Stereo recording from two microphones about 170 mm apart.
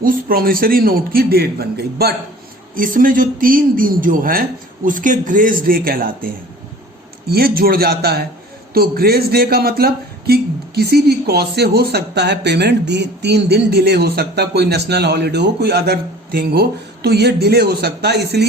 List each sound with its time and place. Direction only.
0.0 s a man's voice: 55° right (ahead or behind)
2.7 s a man's voice: 55° right (ahead or behind); by 18.4 s 75° right (ahead or behind)